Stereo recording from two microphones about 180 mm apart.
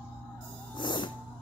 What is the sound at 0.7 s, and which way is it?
Music, 25° left (ahead or behind).